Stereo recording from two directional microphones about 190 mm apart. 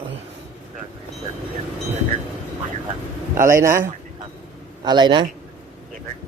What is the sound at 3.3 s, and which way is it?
Speech, 15° right (ahead or behind).